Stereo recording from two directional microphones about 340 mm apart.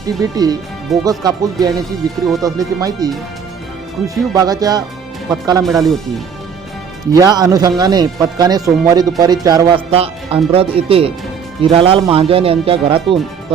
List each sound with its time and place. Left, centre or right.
0.2 s speech: centre
4.1 s speech: centre
5.6 s speech: centre
7.1 s speech: centre